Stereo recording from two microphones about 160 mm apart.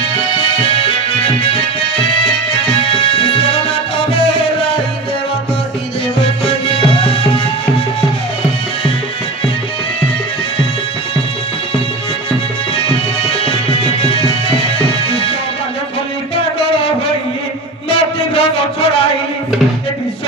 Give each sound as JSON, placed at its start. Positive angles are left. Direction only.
{"t": 0.6, "sound": "music", "side_deg": 35}
{"t": 3.2, "sound": "music", "side_deg": 35}
{"t": 6.7, "sound": "music", "side_deg": 35}
{"t": 13.4, "sound": "music", "side_deg": 35}
{"t": 17.8, "sound": "music", "side_deg": 35}